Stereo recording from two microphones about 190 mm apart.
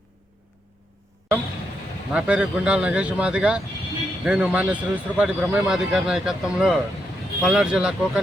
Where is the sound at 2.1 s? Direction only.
5° right (ahead or behind).